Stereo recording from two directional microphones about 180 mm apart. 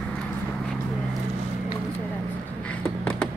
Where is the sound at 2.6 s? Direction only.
5° left (ahead or behind).